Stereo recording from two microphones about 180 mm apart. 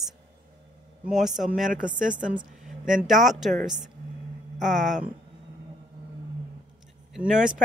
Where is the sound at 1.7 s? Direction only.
45° right (ahead or behind).